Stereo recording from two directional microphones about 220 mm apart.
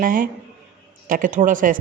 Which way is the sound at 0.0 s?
40° right (ahead or behind).